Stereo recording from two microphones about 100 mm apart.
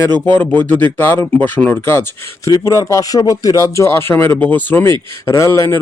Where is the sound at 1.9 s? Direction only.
25° left (ahead or behind).